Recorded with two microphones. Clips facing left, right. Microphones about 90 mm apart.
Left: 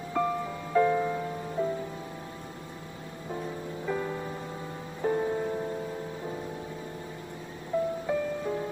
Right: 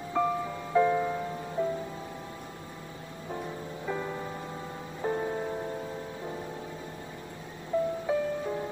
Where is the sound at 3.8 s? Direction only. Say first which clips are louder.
Left 2 dB; 5° right (ahead or behind).